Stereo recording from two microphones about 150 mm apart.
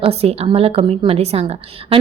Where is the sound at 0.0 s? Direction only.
40° right (ahead or behind).